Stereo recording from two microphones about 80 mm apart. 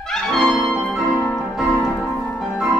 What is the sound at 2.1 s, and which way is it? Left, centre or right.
Music, centre.